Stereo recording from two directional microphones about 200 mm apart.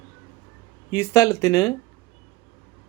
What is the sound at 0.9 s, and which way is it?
Speech, 15° left (ahead or behind).